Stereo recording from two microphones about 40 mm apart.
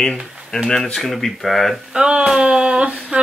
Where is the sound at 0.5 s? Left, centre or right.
Centre.